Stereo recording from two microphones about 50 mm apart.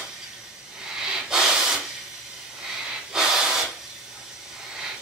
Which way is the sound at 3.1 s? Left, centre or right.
Centre.